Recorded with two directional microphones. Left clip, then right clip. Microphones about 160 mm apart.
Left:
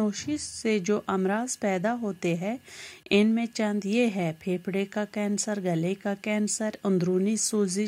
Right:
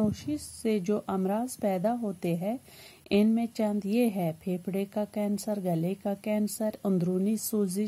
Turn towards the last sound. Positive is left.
turn(degrees=15)  # may be behind; listen again after turning